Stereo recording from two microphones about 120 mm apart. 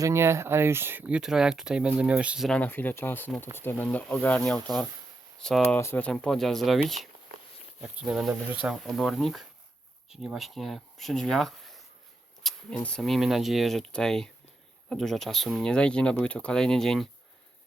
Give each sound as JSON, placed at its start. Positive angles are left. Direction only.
{"t": 0.0, "sound": "speech", "side_deg": -25}
{"t": 2.5, "sound": "speech", "side_deg": 15}
{"t": 5.6, "sound": "speech", "side_deg": 20}
{"t": 6.1, "sound": "speech", "side_deg": 5}
{"t": 12.4, "sound": "a sound", "side_deg": 0}
{"t": 12.8, "sound": "speech", "side_deg": 5}